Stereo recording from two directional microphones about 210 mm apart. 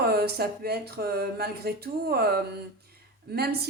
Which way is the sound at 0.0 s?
50° right (ahead or behind).